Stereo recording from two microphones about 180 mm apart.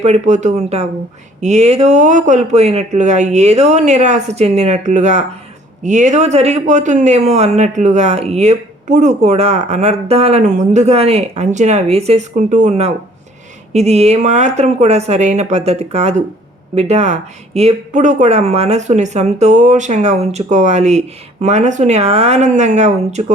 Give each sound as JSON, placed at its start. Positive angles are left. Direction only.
{"t": 0.0, "sound": "a man's voice", "side_deg": -40}